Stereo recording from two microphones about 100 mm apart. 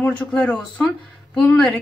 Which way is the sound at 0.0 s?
10° left (ahead or behind).